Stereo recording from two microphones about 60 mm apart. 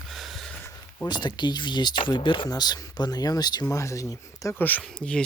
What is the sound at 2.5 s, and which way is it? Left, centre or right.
Speech, left.